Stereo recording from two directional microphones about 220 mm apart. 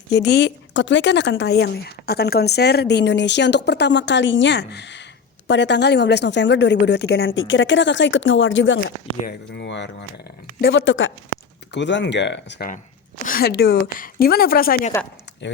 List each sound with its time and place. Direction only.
0.1 s a woman's voice: 50° left (ahead or behind)